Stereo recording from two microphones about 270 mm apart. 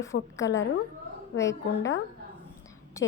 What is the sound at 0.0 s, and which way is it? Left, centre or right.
Speech, centre.